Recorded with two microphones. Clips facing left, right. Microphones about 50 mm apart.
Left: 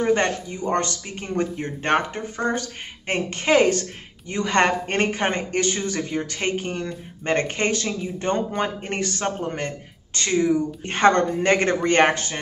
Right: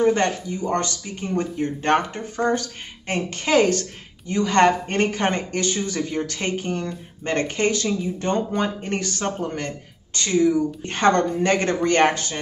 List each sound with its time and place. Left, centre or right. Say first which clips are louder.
0.0 s speech: right 1 dB; left